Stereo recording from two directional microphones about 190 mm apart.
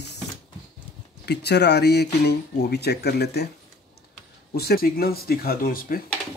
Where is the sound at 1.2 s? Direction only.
60° left (ahead or behind).